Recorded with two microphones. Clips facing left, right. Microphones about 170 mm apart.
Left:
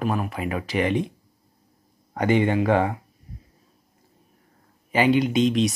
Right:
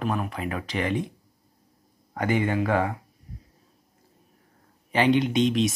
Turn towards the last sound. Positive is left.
turn(degrees=0)  # may be behind; listen again after turning